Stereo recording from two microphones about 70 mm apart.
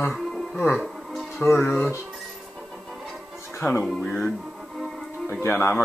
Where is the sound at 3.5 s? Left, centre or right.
Left.